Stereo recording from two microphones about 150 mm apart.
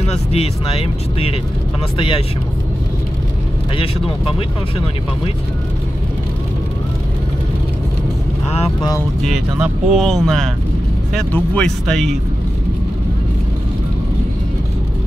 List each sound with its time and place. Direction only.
0.0 s speech: 45° left (ahead or behind)
4.4 s speech: 35° left (ahead or behind)
9.6 s speech: centre (ahead or behind)